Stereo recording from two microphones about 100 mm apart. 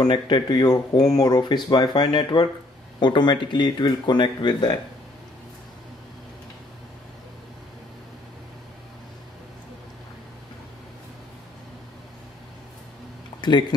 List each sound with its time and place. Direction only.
0.0 s speech: 45° left (ahead or behind)
13.4 s speech: 50° left (ahead or behind)